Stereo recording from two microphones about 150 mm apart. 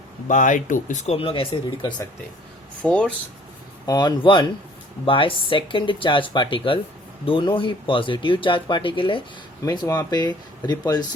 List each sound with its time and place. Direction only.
0.3 s speech: 55° left (ahead or behind); by 1.9 s 35° left (ahead or behind)
2.8 s speech: 5° left (ahead or behind)
3.8 s speech: 30° left (ahead or behind)